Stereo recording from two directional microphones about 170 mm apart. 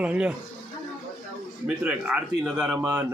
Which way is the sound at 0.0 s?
5° right (ahead or behind).